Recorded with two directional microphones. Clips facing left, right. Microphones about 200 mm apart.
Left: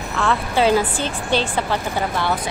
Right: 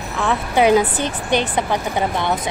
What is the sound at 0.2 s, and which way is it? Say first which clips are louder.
A woman's voice: right 2 dB; 15° right (ahead or behind).